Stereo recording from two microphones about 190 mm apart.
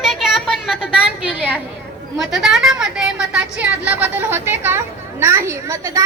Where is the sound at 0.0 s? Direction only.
Centre (ahead or behind).